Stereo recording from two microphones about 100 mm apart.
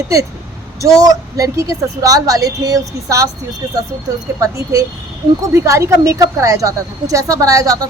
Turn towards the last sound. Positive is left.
turn(degrees=-35)  # may be behind; listen again after turning